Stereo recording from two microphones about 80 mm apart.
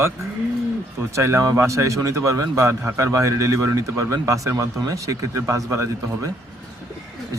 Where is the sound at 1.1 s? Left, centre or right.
Right.